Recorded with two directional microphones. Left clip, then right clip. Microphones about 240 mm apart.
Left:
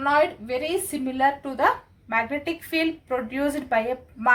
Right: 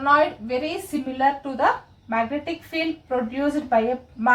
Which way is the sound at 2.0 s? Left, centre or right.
Left.